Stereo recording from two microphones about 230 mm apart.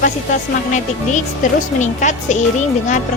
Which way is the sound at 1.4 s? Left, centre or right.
Left.